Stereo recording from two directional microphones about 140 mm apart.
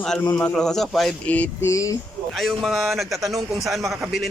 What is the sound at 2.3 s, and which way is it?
Speech, centre (ahead or behind).